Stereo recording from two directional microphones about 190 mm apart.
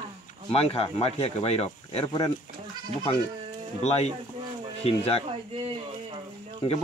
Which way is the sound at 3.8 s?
35° left (ahead or behind).